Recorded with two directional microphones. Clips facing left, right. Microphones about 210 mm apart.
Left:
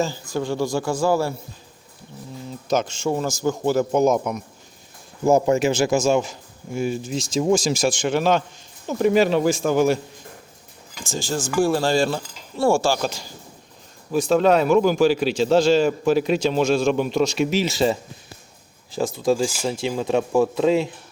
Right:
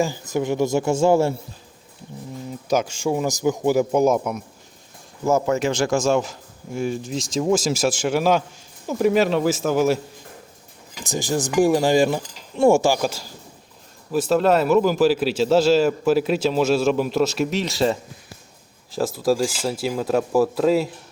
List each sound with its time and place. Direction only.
0.0 s a man's voice: 15° right (ahead or behind)
2.5 s speech: 10° right (ahead or behind)
5.5 s a man's voice: 5° left (ahead or behind)
11.0 s a man's voice: 15° right (ahead or behind)